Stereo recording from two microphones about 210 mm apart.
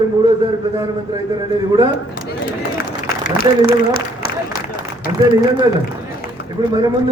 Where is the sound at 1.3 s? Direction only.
15° right (ahead or behind).